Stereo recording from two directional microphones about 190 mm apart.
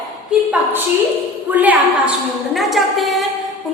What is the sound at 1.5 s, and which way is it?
A woman's voice, 10° right (ahead or behind).